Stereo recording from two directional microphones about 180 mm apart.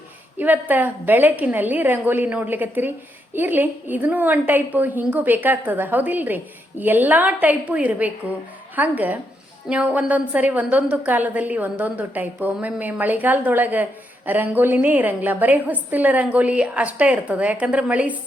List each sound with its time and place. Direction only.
0.3 s a woman's voice: 10° right (ahead or behind)